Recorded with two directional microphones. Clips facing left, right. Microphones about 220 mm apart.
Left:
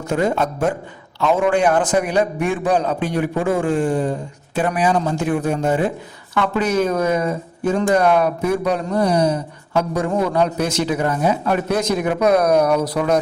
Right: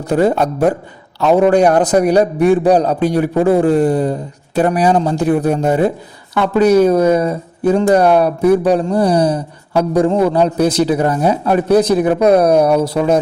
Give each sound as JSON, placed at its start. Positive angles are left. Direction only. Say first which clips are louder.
{"t": 0.0, "sound": "a woman's voice", "louder": "right 6 dB", "side_deg": -35}